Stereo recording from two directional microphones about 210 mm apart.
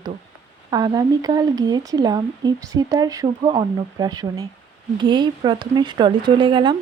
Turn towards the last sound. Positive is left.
turn(degrees=-25)  # may be behind; listen again after turning